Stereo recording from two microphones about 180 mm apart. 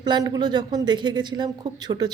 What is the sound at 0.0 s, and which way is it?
A woman's voice, 20° right (ahead or behind).